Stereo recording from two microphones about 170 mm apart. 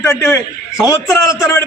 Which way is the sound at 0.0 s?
15° left (ahead or behind).